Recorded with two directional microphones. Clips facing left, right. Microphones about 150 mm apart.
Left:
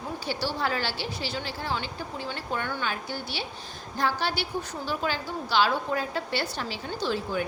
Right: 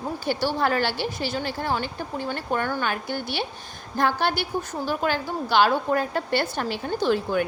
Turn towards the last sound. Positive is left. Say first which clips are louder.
# right 6 dB
turn(degrees=-55)  # may be behind; listen again after turning